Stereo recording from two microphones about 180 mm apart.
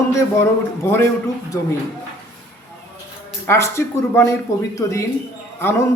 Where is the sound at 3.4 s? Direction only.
15° left (ahead or behind).